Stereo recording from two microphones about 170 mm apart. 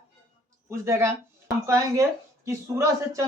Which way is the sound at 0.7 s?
15° right (ahead or behind).